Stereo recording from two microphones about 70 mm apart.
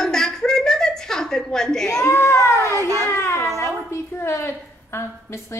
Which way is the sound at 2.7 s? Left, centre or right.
Right.